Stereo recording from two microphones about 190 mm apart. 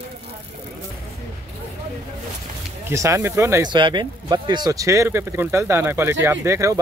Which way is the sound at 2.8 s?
15° right (ahead or behind).